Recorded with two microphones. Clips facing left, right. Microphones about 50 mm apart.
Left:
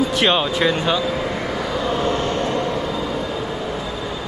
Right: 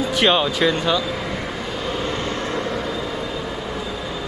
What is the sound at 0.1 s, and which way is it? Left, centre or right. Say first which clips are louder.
Speech: even; centre.